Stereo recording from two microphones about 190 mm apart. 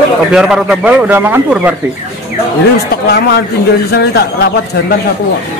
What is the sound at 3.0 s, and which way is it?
Speech, 60° left (ahead or behind).